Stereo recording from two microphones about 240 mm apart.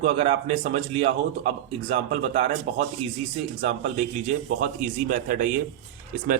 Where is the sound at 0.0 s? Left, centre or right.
Right.